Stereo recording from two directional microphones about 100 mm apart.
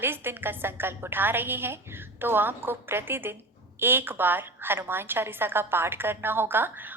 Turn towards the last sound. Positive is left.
turn(degrees=-20)  # may be behind; listen again after turning